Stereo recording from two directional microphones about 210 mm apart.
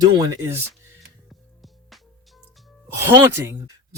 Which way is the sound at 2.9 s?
10° right (ahead or behind).